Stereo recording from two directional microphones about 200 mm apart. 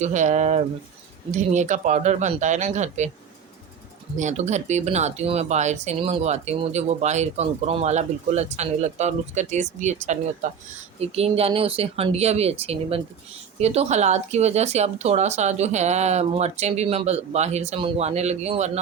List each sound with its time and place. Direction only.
0.0 s speech: 35° right (ahead or behind)
4.2 s speech: 35° right (ahead or behind)